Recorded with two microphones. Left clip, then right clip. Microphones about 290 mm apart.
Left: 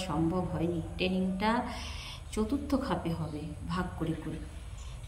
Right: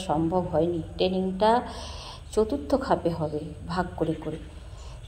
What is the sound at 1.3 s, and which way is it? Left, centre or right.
Speech, centre.